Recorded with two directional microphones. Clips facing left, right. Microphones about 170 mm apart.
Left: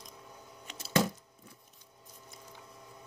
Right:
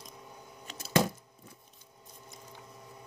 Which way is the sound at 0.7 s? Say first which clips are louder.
Right 2 dB; 25° left (ahead or behind).